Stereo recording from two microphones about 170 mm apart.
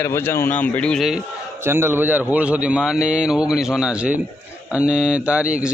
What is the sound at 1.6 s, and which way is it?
Speech, 15° right (ahead or behind).